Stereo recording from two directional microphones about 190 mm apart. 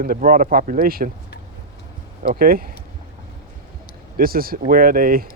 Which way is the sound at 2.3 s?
50° right (ahead or behind).